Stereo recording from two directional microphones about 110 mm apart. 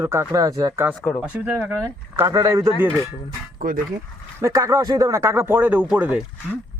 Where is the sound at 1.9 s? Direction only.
30° right (ahead or behind).